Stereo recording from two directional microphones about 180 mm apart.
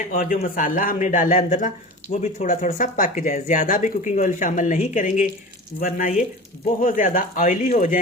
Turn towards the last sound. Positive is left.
turn(degrees=45)  # may be behind; listen again after turning